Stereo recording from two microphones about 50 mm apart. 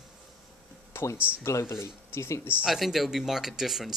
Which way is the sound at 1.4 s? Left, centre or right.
Left.